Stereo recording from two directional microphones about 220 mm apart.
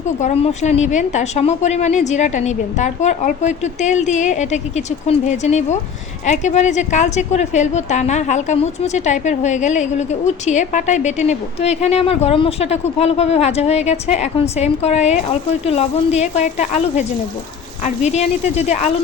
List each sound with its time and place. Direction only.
0.2 s a woman's voice: 30° left (ahead or behind)